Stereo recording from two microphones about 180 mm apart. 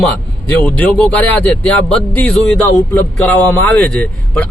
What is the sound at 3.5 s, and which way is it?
Speech, 10° left (ahead or behind).